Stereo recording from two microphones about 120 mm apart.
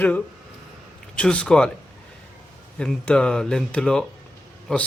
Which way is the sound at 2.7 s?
5° left (ahead or behind).